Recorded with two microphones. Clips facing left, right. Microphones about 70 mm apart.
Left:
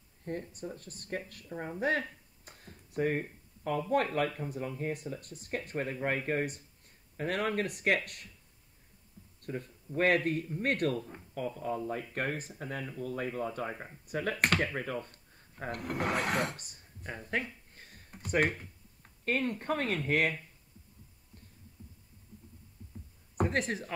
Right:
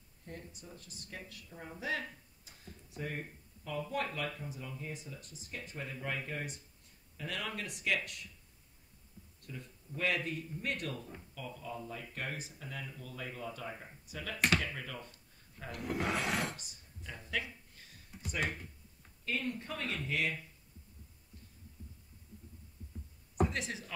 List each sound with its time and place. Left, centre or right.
0.2 s speech: left
1.8 s a sound: left
3.9 s speech: left
9.4 s speech: left
23.4 s speech: left